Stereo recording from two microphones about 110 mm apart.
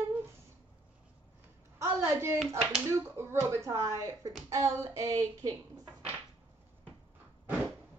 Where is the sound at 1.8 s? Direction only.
25° right (ahead or behind).